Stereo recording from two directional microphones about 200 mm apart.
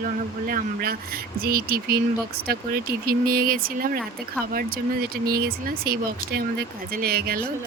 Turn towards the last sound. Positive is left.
turn(degrees=-50)  # may be behind; listen again after turning